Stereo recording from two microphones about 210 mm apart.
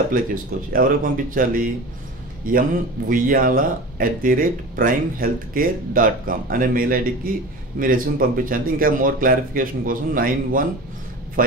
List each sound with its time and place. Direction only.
0.1 s speech: 40° right (ahead or behind)